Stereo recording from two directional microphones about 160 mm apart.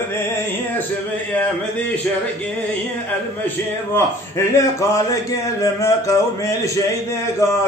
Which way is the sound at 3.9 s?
15° left (ahead or behind).